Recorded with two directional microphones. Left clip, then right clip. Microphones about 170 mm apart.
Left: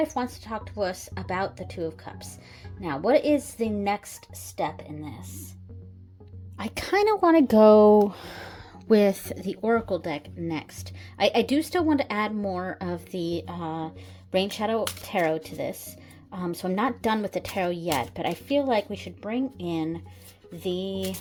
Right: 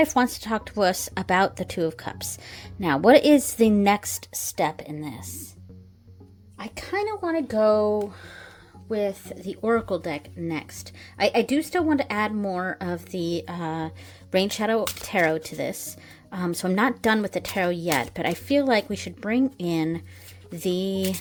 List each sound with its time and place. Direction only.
0.0 s speech: 55° right (ahead or behind); by 5.3 s 35° right (ahead or behind)
6.6 s a woman's voice: 25° left (ahead or behind)
6.9 s speech: 50° left (ahead or behind)
9.2 s a woman's voice: 25° left (ahead or behind)
9.6 s a woman's voice: 5° right (ahead or behind); by 21.2 s 30° right (ahead or behind)